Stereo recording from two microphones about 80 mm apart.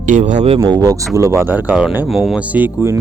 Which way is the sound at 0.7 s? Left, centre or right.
Right.